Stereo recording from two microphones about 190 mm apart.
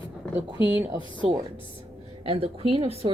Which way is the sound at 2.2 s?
30° right (ahead or behind).